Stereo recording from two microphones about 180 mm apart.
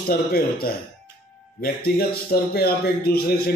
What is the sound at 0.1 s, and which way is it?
Speech, 55° left (ahead or behind).